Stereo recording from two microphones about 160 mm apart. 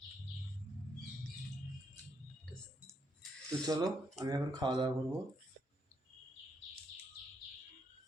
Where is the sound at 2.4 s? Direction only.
5° left (ahead or behind).